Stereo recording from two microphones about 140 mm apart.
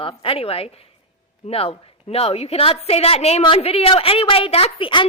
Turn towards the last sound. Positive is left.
turn(degrees=40)  # may be behind; listen again after turning